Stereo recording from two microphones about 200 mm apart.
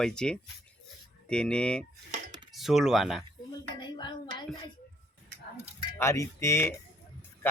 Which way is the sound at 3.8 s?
20° left (ahead or behind).